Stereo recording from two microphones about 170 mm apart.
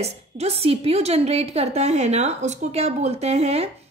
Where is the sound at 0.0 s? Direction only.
40° right (ahead or behind).